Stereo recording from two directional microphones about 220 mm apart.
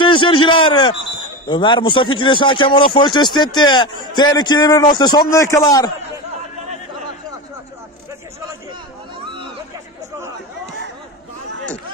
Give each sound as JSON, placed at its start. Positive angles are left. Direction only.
{"t": 0.0, "sound": "a sound", "side_deg": 25}
{"t": 1.5, "sound": "speech", "side_deg": 20}
{"t": 9.2, "sound": "hubbub", "side_deg": -20}